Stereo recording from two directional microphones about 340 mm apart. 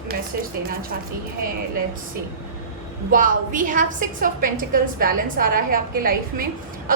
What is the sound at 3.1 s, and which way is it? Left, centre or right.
A woman's voice, right.